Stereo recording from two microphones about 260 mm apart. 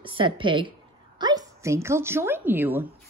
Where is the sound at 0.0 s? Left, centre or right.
Centre.